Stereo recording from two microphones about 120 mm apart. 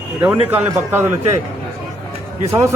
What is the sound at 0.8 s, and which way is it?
Speech, 20° right (ahead or behind).